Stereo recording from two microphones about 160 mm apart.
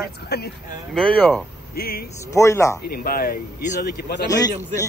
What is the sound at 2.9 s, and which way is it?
Speech, 70° left (ahead or behind).